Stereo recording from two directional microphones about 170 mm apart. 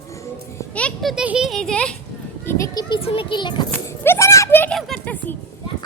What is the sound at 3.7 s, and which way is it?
A child's voice, 15° left (ahead or behind).